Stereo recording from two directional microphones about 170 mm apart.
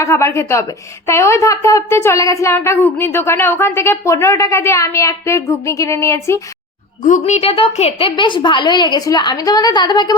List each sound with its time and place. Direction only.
0.0 s speech: 15° left (ahead or behind)
7.0 s a woman's voice: 45° left (ahead or behind); by 10.2 s 25° left (ahead or behind)